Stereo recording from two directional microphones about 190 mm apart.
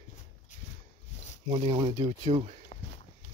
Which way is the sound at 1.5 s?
30° right (ahead or behind).